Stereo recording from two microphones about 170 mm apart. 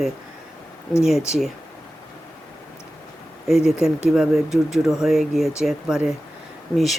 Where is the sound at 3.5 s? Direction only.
5° right (ahead or behind).